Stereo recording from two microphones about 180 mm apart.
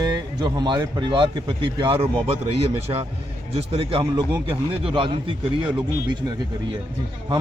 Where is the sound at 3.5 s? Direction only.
35° right (ahead or behind).